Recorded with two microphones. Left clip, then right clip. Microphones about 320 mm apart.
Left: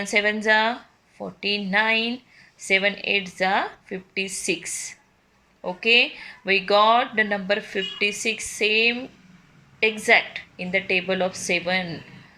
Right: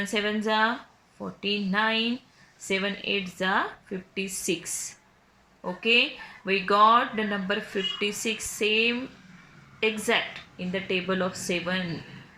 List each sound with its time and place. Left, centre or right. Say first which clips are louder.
0.1 s speech: left 9 dB; centre